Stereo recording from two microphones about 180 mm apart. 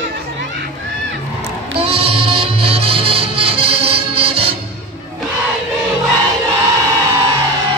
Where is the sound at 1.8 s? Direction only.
30° right (ahead or behind).